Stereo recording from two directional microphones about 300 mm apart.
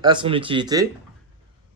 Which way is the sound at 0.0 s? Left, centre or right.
Centre.